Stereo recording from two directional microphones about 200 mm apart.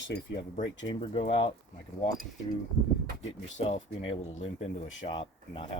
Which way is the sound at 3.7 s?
30° left (ahead or behind).